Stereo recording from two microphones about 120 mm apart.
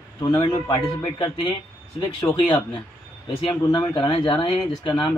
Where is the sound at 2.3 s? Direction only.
45° left (ahead or behind).